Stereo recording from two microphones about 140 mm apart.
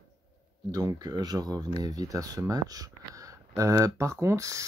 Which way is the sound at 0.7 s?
30° right (ahead or behind).